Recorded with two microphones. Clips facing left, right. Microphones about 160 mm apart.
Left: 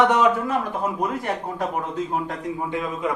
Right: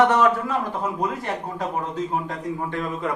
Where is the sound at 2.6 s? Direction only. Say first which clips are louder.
Left 3 dB; 10° left (ahead or behind).